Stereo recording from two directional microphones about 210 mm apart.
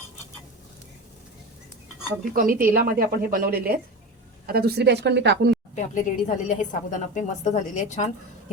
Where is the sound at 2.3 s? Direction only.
40° right (ahead or behind).